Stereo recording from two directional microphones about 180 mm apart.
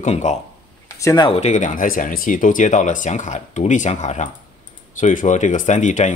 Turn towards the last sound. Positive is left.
turn(degrees=40)  # may be behind; listen again after turning